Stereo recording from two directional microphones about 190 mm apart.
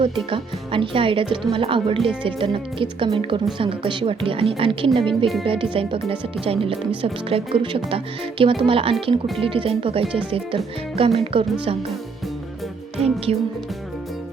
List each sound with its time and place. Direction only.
0.3 s speech: 30° right (ahead or behind)